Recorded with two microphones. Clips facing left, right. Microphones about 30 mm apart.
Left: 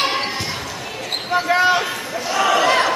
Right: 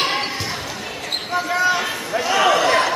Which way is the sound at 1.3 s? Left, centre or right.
Left.